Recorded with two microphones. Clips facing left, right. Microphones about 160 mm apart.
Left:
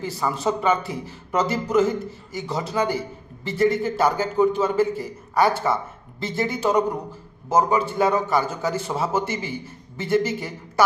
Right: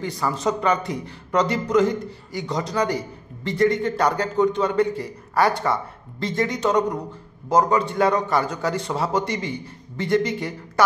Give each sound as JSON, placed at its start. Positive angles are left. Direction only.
{"t": 0.0, "sound": "speech", "side_deg": 5}